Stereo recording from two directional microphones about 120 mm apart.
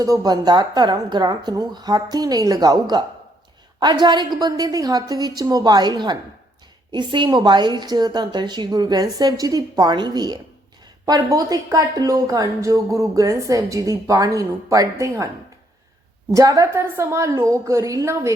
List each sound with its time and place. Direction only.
0.0 s a woman's voice: 30° right (ahead or behind)
4.0 s a woman's voice: 40° right (ahead or behind)
16.3 s speech: 30° right (ahead or behind)